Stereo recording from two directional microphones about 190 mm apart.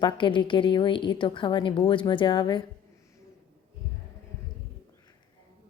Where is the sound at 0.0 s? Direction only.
25° left (ahead or behind).